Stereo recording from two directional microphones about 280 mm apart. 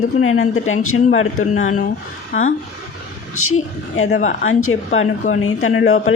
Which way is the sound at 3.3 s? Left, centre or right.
Left.